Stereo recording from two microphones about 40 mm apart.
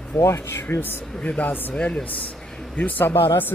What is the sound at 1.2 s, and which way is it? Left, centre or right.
Speech, left.